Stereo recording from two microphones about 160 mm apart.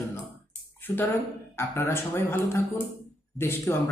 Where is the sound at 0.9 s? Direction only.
20° left (ahead or behind).